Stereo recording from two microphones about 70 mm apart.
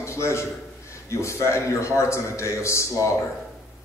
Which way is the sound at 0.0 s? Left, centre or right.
Left.